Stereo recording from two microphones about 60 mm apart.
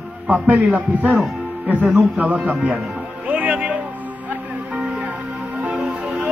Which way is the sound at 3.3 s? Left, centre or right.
Right.